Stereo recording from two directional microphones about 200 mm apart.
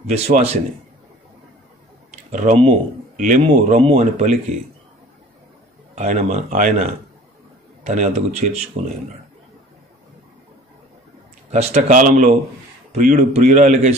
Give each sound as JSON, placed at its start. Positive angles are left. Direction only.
{"t": 0.0, "sound": "speech", "side_deg": -30}
{"t": 2.0, "sound": "typing", "side_deg": -35}
{"t": 3.2, "sound": "speech", "side_deg": -40}
{"t": 5.9, "sound": "speech", "side_deg": -35}
{"t": 7.9, "sound": "speech", "side_deg": -35}
{"t": 11.5, "sound": "speech", "side_deg": -30}